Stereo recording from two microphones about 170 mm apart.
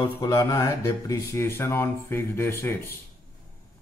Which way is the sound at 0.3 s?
20° left (ahead or behind).